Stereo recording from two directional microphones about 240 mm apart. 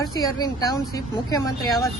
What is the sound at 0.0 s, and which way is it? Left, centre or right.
Speech, centre.